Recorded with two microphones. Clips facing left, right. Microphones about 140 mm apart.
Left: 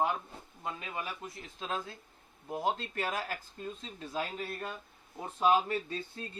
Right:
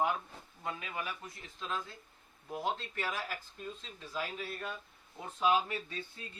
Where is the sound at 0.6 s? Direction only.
25° left (ahead or behind).